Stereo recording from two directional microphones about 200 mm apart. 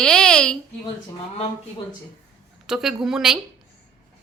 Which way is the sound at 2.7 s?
Centre (ahead or behind).